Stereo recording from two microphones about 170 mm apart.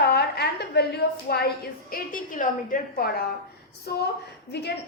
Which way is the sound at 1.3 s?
70° left (ahead or behind).